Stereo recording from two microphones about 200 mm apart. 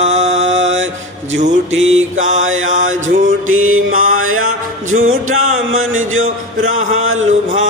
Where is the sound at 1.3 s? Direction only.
35° right (ahead or behind).